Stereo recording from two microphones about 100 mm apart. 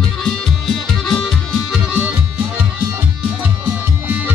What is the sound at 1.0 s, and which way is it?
Music, 5° left (ahead or behind).